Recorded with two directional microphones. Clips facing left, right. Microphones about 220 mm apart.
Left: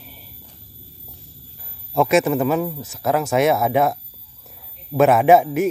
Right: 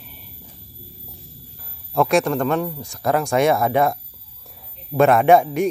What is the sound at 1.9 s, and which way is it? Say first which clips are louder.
Speech: left 1 dB; 5° left (ahead or behind).